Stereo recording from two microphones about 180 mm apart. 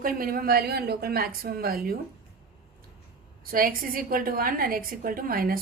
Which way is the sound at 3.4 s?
50° right (ahead or behind).